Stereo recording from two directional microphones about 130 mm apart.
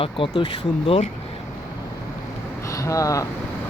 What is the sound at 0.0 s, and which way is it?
Speech, 40° left (ahead or behind).